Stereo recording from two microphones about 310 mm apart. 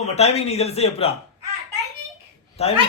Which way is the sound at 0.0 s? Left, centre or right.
Left.